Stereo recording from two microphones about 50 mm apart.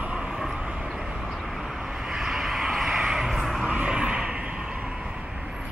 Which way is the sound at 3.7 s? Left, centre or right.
Right.